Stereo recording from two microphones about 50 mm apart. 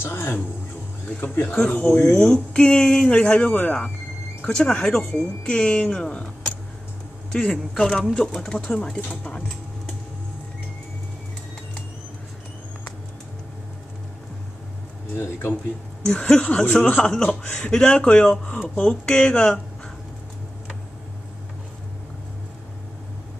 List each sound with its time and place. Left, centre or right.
0.0 s speech: left
1.6 s speech: centre
7.7 s speech: centre
15.1 s speech: left
16.1 s speech: centre
17.1 s speech: centre